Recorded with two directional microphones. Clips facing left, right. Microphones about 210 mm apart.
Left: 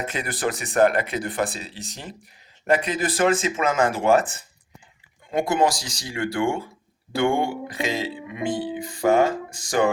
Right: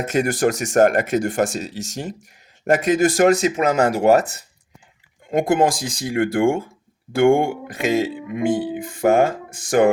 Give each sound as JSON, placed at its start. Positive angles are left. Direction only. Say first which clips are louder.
{"t": 0.0, "sound": "music", "louder": "right 8 dB", "side_deg": -45}
{"t": 3.6, "sound": "speech", "louder": "right 4 dB", "side_deg": -40}
{"t": 5.3, "sound": "music", "louder": "right 4 dB", "side_deg": -50}